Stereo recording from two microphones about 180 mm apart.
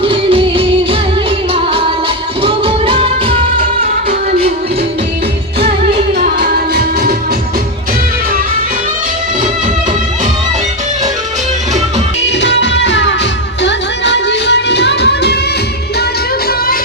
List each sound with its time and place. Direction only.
0.0 s music: 30° right (ahead or behind)
6.1 s music: 55° right (ahead or behind)
12.2 s music: 75° left (ahead or behind)